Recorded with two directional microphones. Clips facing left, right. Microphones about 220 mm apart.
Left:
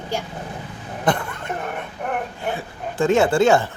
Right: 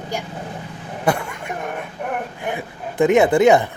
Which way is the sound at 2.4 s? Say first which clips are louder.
Even; 20° right (ahead or behind).